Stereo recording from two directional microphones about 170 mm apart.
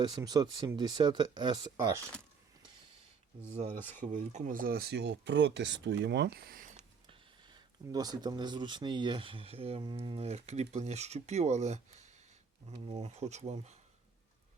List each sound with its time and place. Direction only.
0.0 s speech: 25° right (ahead or behind)
3.5 s speech: 45° right (ahead or behind)
6.7 s speech: 30° right (ahead or behind)